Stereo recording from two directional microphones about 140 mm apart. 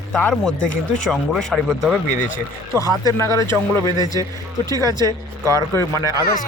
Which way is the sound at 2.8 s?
25° left (ahead or behind).